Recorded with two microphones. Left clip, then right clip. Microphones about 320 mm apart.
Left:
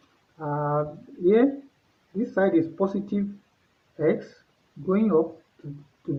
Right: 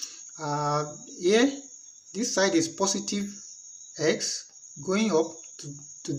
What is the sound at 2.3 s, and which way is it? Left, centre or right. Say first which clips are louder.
Speech: left 2 dB; left.